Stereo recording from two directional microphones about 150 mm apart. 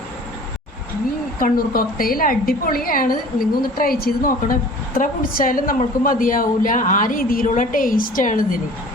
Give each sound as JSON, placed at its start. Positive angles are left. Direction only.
{"t": 1.4, "sound": "a woman's voice", "side_deg": 70}